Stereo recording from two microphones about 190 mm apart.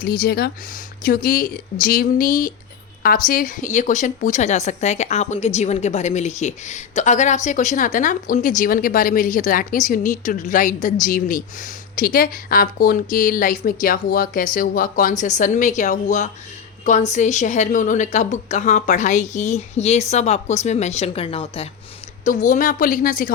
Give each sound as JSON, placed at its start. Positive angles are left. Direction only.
{"t": 0.0, "sound": "a woman's voice", "side_deg": 55}
{"t": 22.2, "sound": "a woman's voice", "side_deg": 40}